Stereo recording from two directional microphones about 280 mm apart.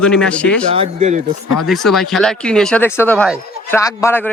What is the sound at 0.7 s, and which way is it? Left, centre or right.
Speech, right.